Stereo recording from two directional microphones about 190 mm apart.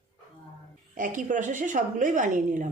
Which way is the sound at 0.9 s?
45° right (ahead or behind).